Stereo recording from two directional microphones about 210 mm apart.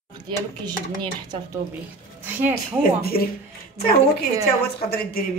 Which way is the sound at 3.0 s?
45° left (ahead or behind).